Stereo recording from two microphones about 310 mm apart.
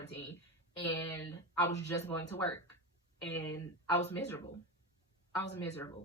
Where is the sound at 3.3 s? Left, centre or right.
Centre.